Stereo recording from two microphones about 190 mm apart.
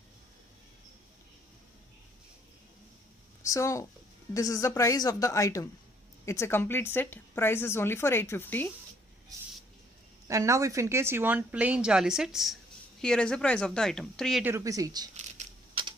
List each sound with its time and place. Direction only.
3.4 s a woman's voice: 15° left (ahead or behind)
10.2 s a woman's voice: 15° right (ahead or behind); by 14.4 s centre (ahead or behind)
14.4 s a woman's voice: 15° right (ahead or behind)
15.1 s a sound: 35° right (ahead or behind)